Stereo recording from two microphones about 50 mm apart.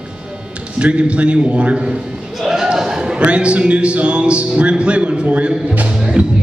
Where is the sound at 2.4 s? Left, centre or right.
Centre.